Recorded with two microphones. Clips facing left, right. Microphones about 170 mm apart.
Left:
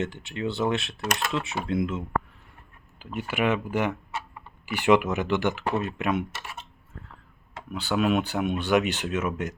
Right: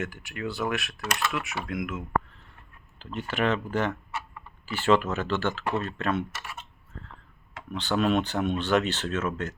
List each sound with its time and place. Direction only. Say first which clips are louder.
0.0 s speech: left 4 dB; 25° left (ahead or behind)
3.0 s speech: left 1 dB; 10° left (ahead or behind)
7.7 s speech: left 1 dB; 10° left (ahead or behind)